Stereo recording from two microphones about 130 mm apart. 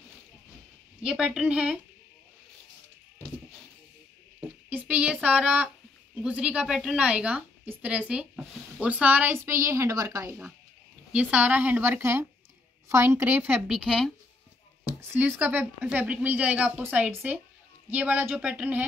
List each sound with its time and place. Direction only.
1.0 s speech: 5° right (ahead or behind)
4.4 s a sound: 10° right (ahead or behind)
6.1 s a woman's voice: 10° right (ahead or behind)
11.1 s speech: 10° right (ahead or behind)
15.0 s speech: 15° right (ahead or behind)